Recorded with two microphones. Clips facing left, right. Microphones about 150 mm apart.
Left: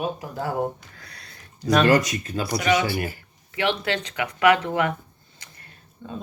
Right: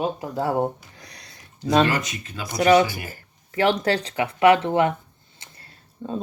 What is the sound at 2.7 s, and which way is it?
Speech, 45° right (ahead or behind).